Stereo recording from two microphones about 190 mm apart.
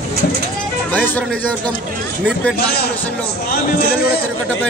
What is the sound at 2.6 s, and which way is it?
A man's voice, 55° left (ahead or behind).